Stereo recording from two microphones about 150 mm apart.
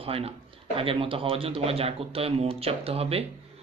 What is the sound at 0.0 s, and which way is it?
Speech, 40° right (ahead or behind).